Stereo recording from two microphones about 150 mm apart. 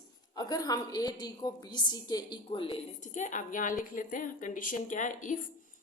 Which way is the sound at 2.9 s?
55° left (ahead or behind).